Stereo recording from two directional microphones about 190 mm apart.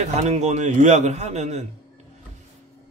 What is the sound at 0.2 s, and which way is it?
Speech, 35° right (ahead or behind).